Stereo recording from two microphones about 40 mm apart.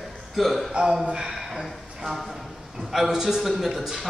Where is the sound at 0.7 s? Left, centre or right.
Right.